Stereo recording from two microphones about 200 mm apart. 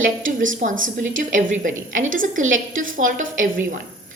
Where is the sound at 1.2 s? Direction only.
40° right (ahead or behind).